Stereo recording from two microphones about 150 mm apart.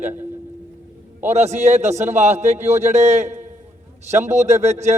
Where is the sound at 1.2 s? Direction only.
50° right (ahead or behind).